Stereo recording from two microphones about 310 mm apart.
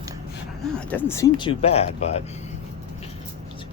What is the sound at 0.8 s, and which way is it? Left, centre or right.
Speech, centre.